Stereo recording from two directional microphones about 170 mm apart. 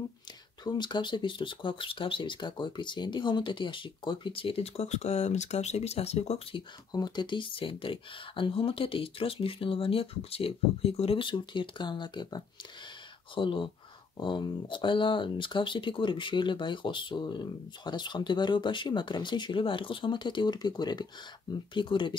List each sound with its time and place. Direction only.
0.7 s speech: 25° left (ahead or behind)
6.9 s speech: 25° left (ahead or behind)